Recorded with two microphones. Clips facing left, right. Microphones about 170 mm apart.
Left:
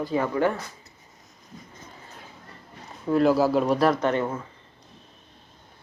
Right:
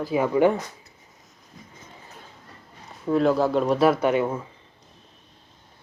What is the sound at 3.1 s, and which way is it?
Speech, centre (ahead or behind).